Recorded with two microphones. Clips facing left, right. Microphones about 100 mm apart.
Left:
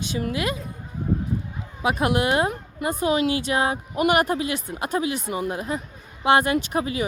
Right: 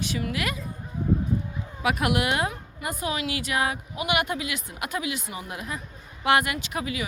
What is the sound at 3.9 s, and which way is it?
Speech, 40° left (ahead or behind).